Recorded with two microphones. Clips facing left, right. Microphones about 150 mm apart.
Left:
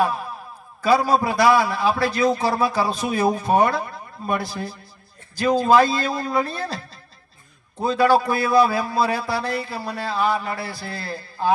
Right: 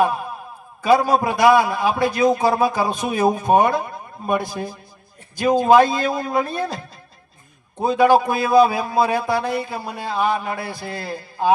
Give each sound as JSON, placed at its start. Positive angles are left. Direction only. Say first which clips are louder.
{"t": 0.8, "sound": "a man's voice", "louder": "right 2 dB", "side_deg": -15}
{"t": 7.9, "sound": "a man's voice", "louder": "right 2 dB", "side_deg": -15}